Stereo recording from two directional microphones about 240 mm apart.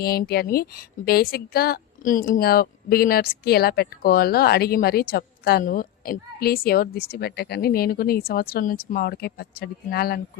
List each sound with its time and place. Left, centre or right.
0.0 s a woman's voice: left